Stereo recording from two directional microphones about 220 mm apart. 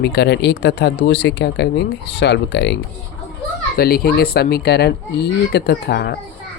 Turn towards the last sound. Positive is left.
turn(degrees=50)  # may be behind; listen again after turning